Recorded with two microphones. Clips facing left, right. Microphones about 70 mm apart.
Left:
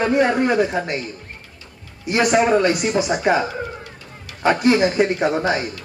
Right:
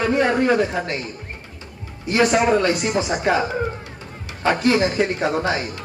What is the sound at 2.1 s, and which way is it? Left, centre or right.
Speech, centre.